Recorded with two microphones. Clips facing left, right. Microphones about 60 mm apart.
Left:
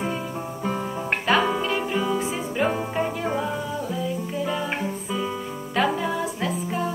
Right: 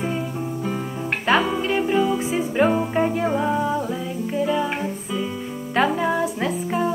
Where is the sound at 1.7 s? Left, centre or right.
Centre.